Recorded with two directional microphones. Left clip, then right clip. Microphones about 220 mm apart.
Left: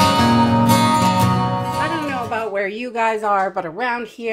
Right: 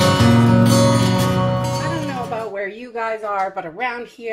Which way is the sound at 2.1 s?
40° left (ahead or behind).